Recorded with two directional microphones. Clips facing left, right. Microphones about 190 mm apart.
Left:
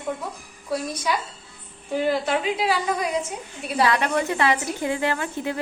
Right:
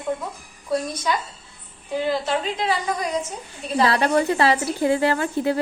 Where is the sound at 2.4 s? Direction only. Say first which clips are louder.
Left 1 dB; 10° left (ahead or behind).